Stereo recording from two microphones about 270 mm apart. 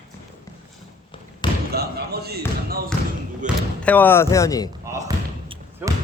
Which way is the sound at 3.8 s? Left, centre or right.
Centre.